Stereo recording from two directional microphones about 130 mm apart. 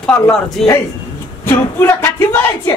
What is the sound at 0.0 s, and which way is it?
Speech, 5° left (ahead or behind).